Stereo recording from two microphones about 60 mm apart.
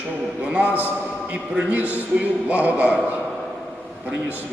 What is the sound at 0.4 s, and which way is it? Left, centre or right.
A man's voice, right.